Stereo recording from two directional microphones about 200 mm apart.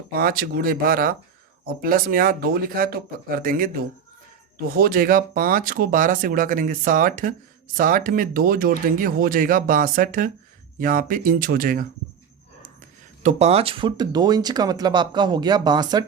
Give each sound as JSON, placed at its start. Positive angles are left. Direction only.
{"t": 0.1, "sound": "speech", "side_deg": -50}
{"t": 4.7, "sound": "speech", "side_deg": -45}
{"t": 13.2, "sound": "speech", "side_deg": -30}